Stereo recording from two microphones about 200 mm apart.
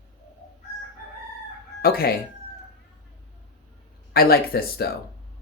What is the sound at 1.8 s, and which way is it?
Speech, 50° left (ahead or behind).